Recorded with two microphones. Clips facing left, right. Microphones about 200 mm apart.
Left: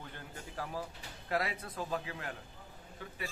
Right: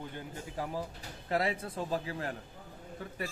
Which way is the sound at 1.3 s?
25° right (ahead or behind).